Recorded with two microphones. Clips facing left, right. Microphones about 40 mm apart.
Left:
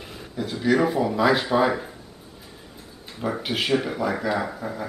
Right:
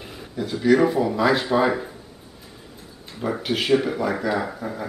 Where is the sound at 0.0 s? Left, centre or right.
Centre.